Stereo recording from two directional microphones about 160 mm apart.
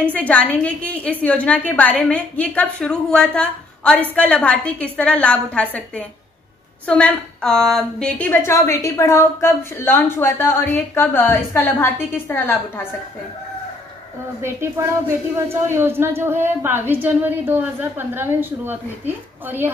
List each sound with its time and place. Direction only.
0.1 s a woman's voice: 10° left (ahead or behind)
14.4 s a woman's voice: 15° right (ahead or behind)